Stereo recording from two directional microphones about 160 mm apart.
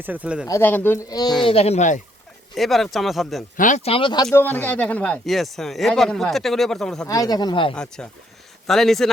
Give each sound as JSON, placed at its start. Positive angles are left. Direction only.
{"t": 0.0, "sound": "speech", "side_deg": -10}
{"t": 0.4, "sound": "speech", "side_deg": 15}
{"t": 1.5, "sound": "speech", "side_deg": 40}
{"t": 2.6, "sound": "speech", "side_deg": 0}
{"t": 3.8, "sound": "speech", "side_deg": 35}
{"t": 4.4, "sound": "speech", "side_deg": 10}
{"t": 7.1, "sound": "speech", "side_deg": 25}
{"t": 8.0, "sound": "speech", "side_deg": 5}